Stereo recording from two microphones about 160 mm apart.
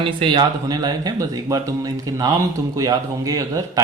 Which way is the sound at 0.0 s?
30° right (ahead or behind).